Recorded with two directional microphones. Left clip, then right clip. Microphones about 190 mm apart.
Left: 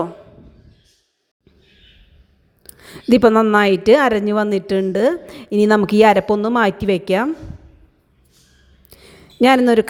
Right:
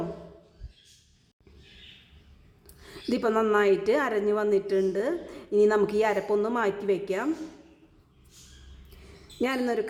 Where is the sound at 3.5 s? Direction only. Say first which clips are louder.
Left 10 dB; 40° left (ahead or behind).